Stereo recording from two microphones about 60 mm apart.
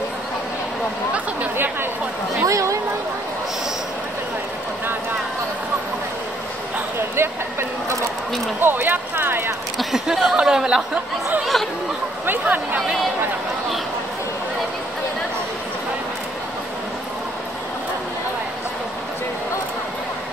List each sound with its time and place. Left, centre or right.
1.1 s a sound: right
2.4 s speech: right
7.2 s speech: right
8.5 s speech: right
9.8 s speech: centre
12.3 s speech: right